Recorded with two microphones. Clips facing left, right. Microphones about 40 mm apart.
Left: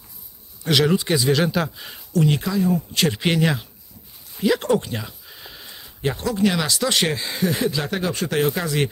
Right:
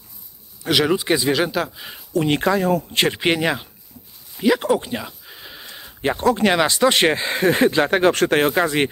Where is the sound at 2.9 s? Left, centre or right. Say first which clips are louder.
Right 2 dB; right.